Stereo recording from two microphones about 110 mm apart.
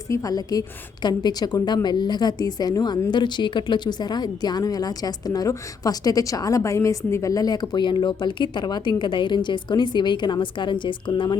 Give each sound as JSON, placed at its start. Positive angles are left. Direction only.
{"t": 0.1, "sound": "a woman's voice", "side_deg": 30}